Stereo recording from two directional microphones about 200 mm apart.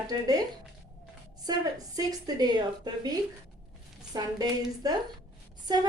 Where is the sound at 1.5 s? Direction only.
20° right (ahead or behind).